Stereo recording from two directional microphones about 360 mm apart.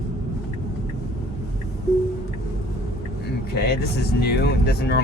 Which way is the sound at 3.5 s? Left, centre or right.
Left.